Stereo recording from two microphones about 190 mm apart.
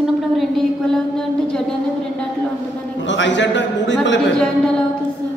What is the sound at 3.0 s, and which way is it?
A man's voice, 75° left (ahead or behind).